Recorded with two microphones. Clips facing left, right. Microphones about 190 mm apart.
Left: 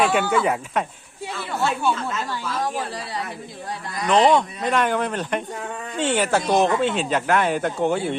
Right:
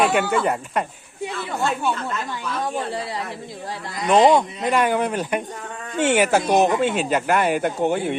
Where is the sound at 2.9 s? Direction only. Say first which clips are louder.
Right 3 dB; 25° right (ahead or behind).